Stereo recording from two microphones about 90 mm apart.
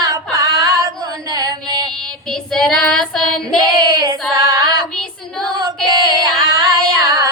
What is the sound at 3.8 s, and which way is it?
Child singing, 45° right (ahead or behind).